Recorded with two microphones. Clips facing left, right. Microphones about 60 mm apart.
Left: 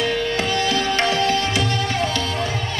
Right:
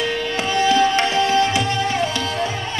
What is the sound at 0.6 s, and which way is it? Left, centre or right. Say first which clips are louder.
Music: right 8 dB; right.